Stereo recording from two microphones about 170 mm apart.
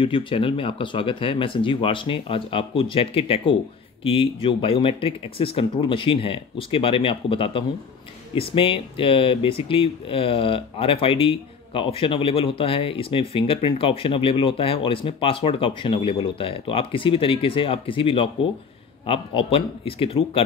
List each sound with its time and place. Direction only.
0.0 s speech: 30° left (ahead or behind)